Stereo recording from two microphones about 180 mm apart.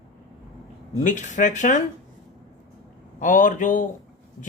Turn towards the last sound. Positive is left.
turn(degrees=45)  # may be behind; listen again after turning